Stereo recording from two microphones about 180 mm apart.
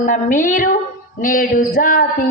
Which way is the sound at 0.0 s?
45° left (ahead or behind).